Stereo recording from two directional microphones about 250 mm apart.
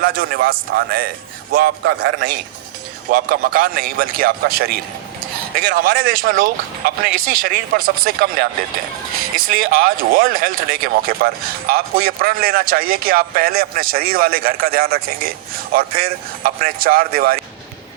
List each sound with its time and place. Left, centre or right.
0.0 s a man's voice: right
3.1 s a man's voice: right